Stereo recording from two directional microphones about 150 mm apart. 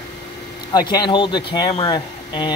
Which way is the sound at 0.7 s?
30° left (ahead or behind).